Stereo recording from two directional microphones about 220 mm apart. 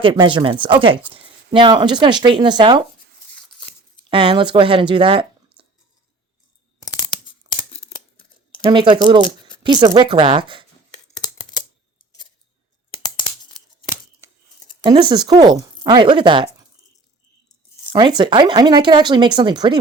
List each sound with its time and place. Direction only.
0.0 s speech: 20° right (ahead or behind)
3.3 s a sound: 5° left (ahead or behind)
4.1 s speech: 20° right (ahead or behind)
7.7 s scissors: 25° left (ahead or behind)
8.7 s speech: 20° right (ahead or behind)
15.1 s speech: 20° right (ahead or behind)
17.9 s speech: 20° right (ahead or behind)